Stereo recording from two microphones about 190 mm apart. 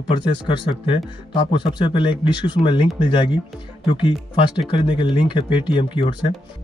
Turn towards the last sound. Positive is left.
turn(degrees=25)  # may be behind; listen again after turning